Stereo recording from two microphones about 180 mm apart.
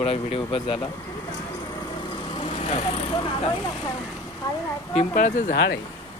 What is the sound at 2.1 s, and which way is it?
Vehicle, 30° left (ahead or behind).